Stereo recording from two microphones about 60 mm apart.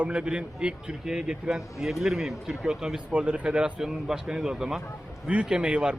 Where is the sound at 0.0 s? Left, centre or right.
Right.